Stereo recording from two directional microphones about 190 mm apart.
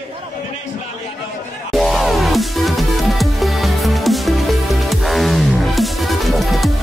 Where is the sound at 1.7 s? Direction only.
Centre (ahead or behind).